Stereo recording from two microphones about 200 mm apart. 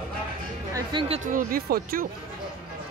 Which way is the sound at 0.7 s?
25° right (ahead or behind).